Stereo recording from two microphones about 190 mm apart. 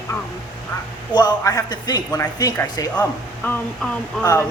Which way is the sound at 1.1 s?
20° left (ahead or behind).